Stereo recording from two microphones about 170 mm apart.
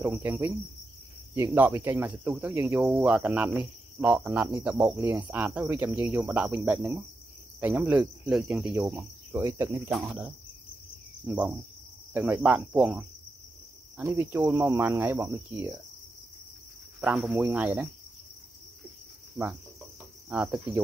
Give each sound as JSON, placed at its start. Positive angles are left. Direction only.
{"t": 0.0, "sound": "speech", "side_deg": -10}
{"t": 8.8, "sound": "speech", "side_deg": -15}
{"t": 9.8, "sound": "cricket", "side_deg": -5}
{"t": 11.2, "sound": "speech", "side_deg": -10}
{"t": 17.0, "sound": "speech", "side_deg": -5}
{"t": 20.2, "sound": "cricket", "side_deg": -5}